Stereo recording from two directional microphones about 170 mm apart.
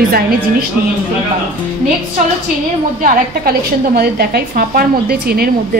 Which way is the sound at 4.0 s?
65° right (ahead or behind).